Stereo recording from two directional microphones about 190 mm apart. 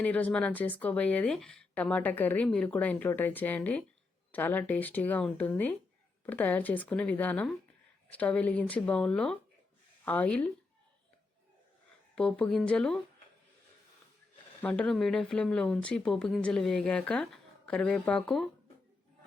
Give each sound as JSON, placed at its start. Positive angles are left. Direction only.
{"t": 0.0, "sound": "speech", "side_deg": 10}
{"t": 12.1, "sound": "speech", "side_deg": 5}
{"t": 14.6, "sound": "speech", "side_deg": 5}